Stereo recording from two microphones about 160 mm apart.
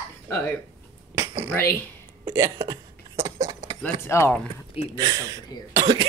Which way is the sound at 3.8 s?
15° left (ahead or behind).